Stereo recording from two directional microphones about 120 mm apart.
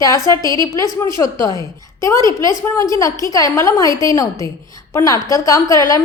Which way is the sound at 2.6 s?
25° left (ahead or behind).